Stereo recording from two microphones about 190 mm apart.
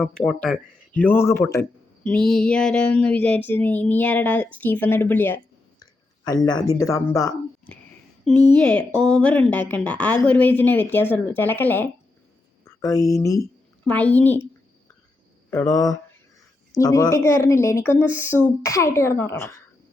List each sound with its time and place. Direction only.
0.0 s child singing: 5° left (ahead or behind)
5.8 s a sound: 20° left (ahead or behind)
6.7 s child singing: 15° left (ahead or behind)
8.2 s a woman's voice: 5° left (ahead or behind)
9.5 s child singing: 10° left (ahead or behind)
12.6 s speech: 15° left (ahead or behind)
13.8 s child singing: 10° left (ahead or behind)
15.4 s child singing: 15° left (ahead or behind)